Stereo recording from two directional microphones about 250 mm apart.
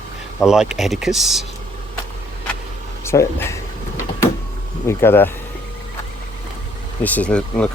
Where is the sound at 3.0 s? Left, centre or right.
Centre.